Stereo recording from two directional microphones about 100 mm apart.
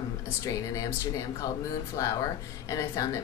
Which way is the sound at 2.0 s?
35° left (ahead or behind).